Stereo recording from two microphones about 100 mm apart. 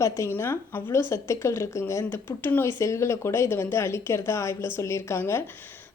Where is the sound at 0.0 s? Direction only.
30° left (ahead or behind).